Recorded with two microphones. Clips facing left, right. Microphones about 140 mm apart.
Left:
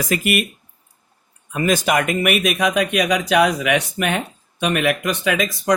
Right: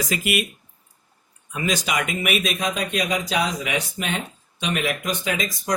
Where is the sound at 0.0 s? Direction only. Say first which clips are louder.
Left 4 dB; 55° left (ahead or behind).